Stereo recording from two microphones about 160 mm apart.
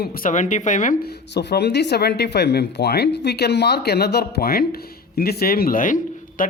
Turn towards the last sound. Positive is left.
turn(degrees=60)  # may be behind; listen again after turning